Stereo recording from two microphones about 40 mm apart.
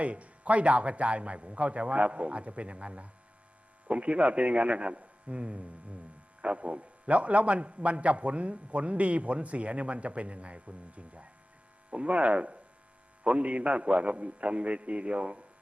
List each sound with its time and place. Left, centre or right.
0.0 s a man's voice: right